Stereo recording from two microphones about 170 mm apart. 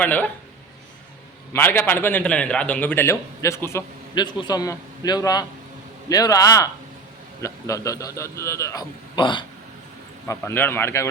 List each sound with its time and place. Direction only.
0.0 s a man's voice: 10° left (ahead or behind)
1.5 s a man's voice: 10° left (ahead or behind); by 9.5 s 30° left (ahead or behind)
10.2 s a man's voice: 10° left (ahead or behind)